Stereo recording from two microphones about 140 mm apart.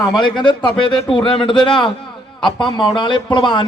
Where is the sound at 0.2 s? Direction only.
35° left (ahead or behind).